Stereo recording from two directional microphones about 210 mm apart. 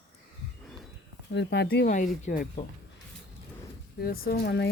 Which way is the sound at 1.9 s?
35° left (ahead or behind).